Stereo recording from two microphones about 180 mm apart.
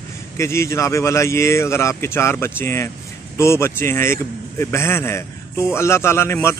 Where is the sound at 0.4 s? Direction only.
15° left (ahead or behind).